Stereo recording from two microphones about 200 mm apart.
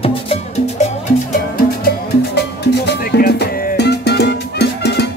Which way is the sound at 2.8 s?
55° left (ahead or behind).